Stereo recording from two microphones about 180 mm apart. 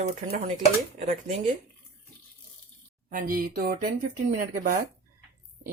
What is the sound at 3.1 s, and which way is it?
Speech, 50° right (ahead or behind).